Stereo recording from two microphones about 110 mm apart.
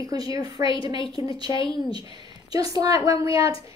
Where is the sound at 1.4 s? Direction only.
55° left (ahead or behind).